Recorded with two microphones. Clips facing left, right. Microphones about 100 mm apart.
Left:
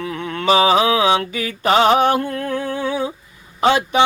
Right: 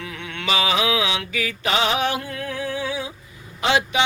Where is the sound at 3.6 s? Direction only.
45° left (ahead or behind).